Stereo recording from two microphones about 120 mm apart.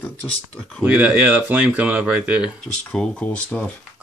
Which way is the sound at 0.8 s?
10° right (ahead or behind).